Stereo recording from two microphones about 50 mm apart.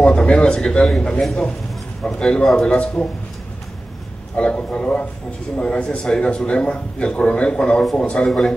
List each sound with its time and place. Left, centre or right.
0.0 s a man's voice: left
4.4 s a man's voice: left
8.3 s a man's voice: centre